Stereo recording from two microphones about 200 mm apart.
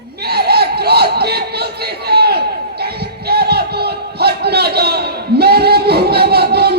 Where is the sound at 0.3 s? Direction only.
55° right (ahead or behind).